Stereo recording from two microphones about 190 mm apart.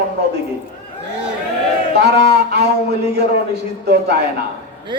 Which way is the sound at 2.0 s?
60° right (ahead or behind).